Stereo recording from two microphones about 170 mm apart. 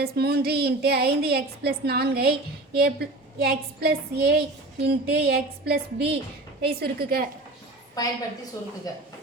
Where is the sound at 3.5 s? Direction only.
65° right (ahead or behind).